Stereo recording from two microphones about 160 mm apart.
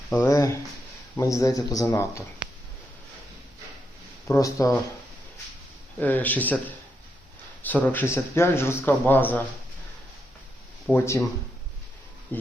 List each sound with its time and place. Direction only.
0.1 s speech: 15° left (ahead or behind)
4.3 s speech: 20° left (ahead or behind)
6.0 s a man's voice: 10° left (ahead or behind)
10.9 s a man's voice: 15° left (ahead or behind)